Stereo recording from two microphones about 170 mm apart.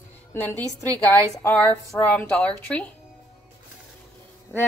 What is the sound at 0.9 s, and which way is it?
Speech, 10° left (ahead or behind).